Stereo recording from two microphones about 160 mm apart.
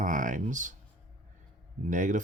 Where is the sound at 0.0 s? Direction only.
55° right (ahead or behind).